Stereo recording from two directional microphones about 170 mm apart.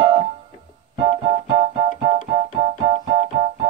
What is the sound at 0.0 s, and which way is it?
Keyboard, 35° right (ahead or behind).